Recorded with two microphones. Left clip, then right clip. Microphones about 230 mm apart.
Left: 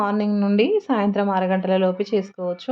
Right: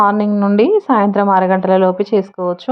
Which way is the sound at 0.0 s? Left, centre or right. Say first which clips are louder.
Right 9 dB; centre.